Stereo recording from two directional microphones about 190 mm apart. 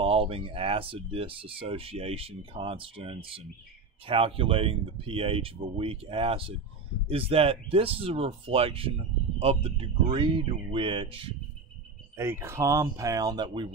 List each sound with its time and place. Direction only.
0.0 s speech: 30° right (ahead or behind)
12.2 s speech: 15° right (ahead or behind)